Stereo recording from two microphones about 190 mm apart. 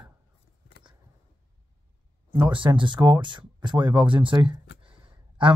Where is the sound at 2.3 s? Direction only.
25° right (ahead or behind).